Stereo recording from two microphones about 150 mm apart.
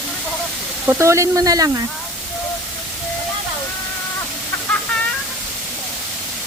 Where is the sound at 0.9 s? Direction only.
20° right (ahead or behind).